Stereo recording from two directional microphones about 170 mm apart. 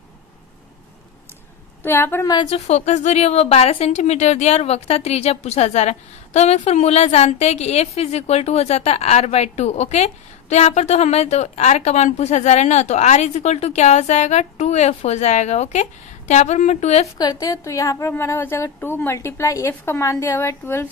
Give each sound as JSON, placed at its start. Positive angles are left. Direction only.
{"t": 1.8, "sound": "a woman's voice", "side_deg": 10}
{"t": 2.6, "sound": "a woman's voice", "side_deg": 45}
{"t": 17.2, "sound": "a woman's voice", "side_deg": 20}